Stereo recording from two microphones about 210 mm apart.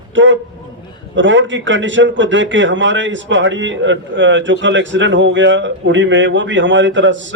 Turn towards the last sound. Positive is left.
turn(degrees=-60)  # may be behind; listen again after turning